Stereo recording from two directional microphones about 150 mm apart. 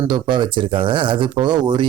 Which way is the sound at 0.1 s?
30° right (ahead or behind).